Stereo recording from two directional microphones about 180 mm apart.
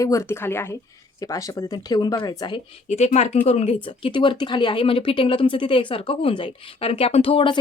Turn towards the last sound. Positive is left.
turn(degrees=30)  # may be behind; listen again after turning